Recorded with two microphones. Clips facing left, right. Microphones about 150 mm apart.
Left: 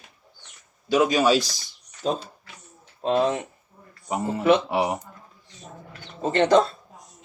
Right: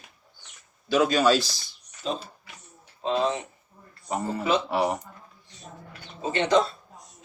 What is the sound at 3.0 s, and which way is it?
Speech, 55° left (ahead or behind).